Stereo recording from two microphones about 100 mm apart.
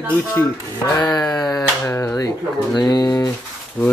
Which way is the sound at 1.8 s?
25° left (ahead or behind).